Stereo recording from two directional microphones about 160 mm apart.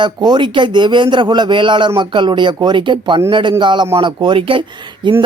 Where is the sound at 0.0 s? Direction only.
30° right (ahead or behind).